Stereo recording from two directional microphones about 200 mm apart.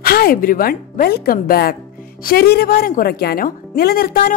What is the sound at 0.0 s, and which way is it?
A woman's voice, 50° left (ahead or behind).